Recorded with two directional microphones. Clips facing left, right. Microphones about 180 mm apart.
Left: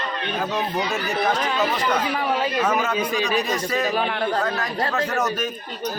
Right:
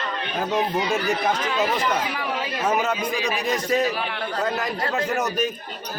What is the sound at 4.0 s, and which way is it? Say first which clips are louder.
Speech: left 6 dB; 50° left (ahead or behind).